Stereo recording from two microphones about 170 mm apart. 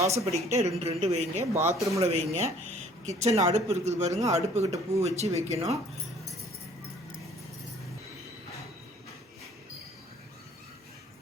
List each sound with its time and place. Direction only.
0.0 s speech: 15° right (ahead or behind)
0.3 s speech: 40° right (ahead or behind)
1.5 s speech: 15° right (ahead or behind)
2.0 s speech: 40° right (ahead or behind)